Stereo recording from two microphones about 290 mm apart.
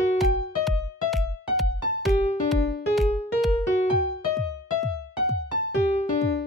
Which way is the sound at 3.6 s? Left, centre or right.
Left.